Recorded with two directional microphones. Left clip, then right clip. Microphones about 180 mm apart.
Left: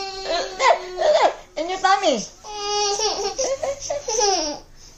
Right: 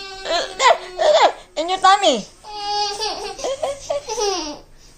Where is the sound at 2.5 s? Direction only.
25° left (ahead or behind).